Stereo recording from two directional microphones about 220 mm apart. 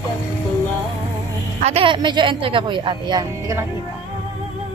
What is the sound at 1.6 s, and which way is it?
Speech, 25° right (ahead or behind).